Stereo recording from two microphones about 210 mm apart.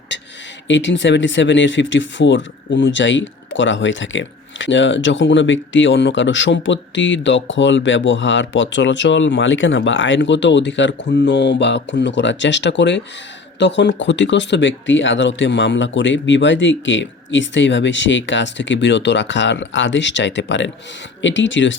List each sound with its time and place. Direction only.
0.7 s speech: 60° left (ahead or behind)